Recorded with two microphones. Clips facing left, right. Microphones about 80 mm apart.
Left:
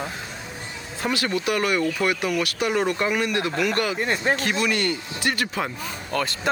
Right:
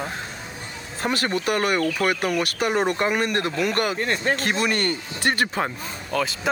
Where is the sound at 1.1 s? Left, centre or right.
Right.